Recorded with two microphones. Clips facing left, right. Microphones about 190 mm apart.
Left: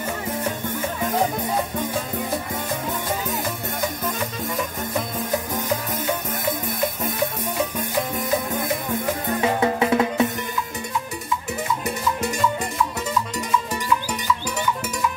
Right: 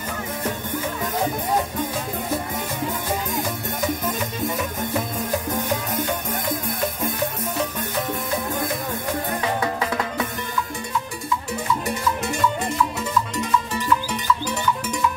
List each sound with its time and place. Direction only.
9.4 s music: 25° left (ahead or behind)